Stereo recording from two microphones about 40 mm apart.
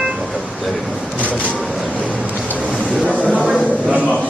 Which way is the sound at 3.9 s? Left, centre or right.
Right.